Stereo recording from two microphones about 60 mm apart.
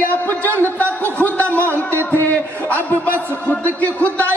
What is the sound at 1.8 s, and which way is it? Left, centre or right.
Music, left.